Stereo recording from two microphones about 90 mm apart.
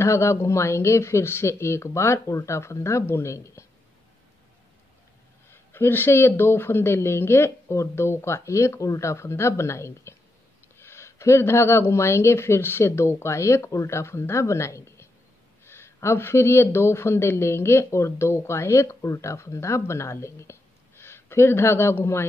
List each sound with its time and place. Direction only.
0.0 s speech: 30° left (ahead or behind)
5.5 s speech: 25° left (ahead or behind)